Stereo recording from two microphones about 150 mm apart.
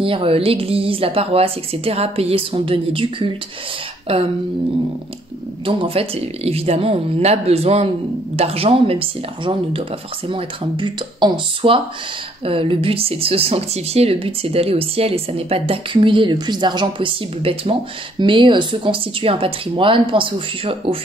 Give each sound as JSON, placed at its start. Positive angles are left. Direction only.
{"t": 0.0, "sound": "speech", "side_deg": -35}
{"t": 5.7, "sound": "speech", "side_deg": -40}